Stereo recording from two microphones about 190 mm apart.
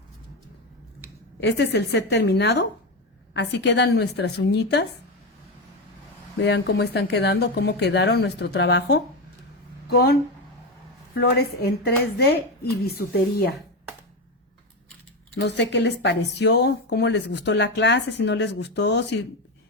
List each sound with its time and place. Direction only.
1.4 s speech: 65° left (ahead or behind)
6.4 s speech: 65° left (ahead or behind)
15.4 s speech: 65° left (ahead or behind)